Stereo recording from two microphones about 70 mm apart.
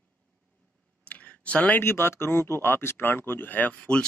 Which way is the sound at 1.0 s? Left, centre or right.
Centre.